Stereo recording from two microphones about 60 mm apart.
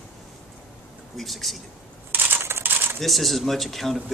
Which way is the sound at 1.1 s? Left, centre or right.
Centre.